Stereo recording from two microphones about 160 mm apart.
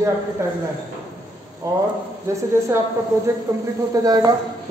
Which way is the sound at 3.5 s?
20° right (ahead or behind).